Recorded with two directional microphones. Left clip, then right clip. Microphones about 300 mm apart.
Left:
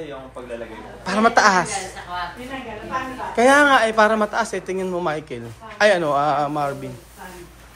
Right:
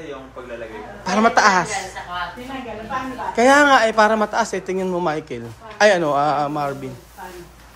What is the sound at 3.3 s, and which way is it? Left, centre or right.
Speech, centre.